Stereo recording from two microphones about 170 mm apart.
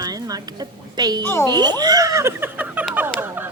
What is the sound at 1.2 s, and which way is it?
Speech, 15° left (ahead or behind).